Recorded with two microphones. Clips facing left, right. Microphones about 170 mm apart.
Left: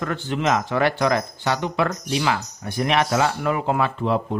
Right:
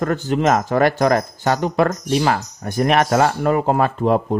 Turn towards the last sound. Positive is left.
turn(degrees=-45)  # may be behind; listen again after turning